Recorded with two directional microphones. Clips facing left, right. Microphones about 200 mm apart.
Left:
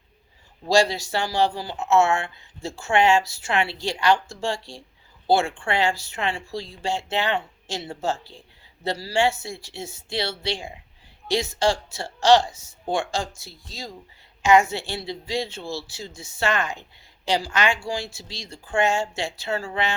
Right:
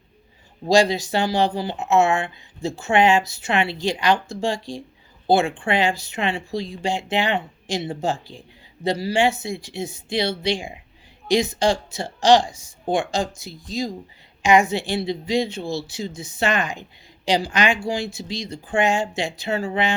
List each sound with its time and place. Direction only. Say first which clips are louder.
0.6 s speech: right 3 dB; 20° right (ahead or behind)